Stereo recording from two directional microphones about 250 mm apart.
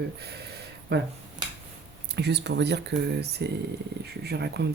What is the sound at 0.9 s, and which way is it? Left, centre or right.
Speech, right.